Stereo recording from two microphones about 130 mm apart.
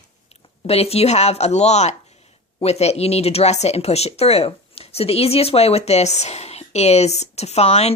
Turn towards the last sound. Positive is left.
turn(degrees=55)  # may be behind; listen again after turning